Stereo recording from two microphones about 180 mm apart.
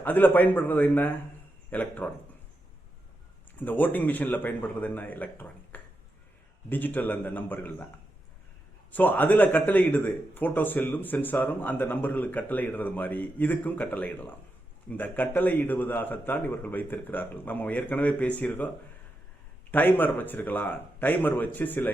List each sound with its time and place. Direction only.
0.0 s speech: 10° left (ahead or behind)
3.6 s speech: 10° left (ahead or behind)
8.9 s speech: 10° left (ahead or behind)
19.7 s speech: 10° left (ahead or behind)